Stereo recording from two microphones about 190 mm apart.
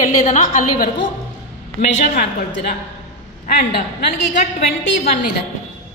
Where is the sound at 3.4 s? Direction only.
55° left (ahead or behind).